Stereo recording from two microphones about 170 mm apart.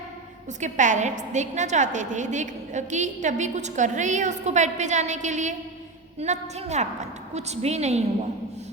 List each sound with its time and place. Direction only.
0.6 s a woman's voice: 45° right (ahead or behind)